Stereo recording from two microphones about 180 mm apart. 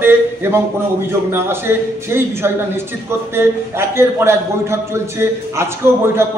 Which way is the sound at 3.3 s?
15° right (ahead or behind).